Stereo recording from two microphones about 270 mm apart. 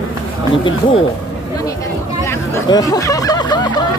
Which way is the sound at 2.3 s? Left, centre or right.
Centre.